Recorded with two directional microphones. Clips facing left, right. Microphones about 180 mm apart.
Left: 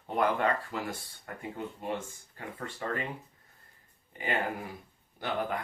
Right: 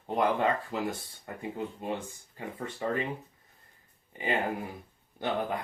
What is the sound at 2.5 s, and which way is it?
Speech, 20° right (ahead or behind).